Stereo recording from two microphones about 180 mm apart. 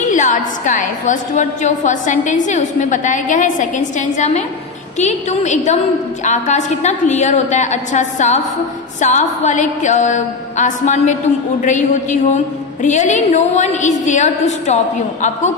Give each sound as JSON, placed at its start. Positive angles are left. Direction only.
{"t": 0.1, "sound": "a woman's voice", "side_deg": 45}